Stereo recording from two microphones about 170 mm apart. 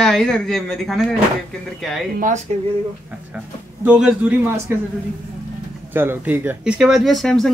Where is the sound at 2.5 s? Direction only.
40° right (ahead or behind).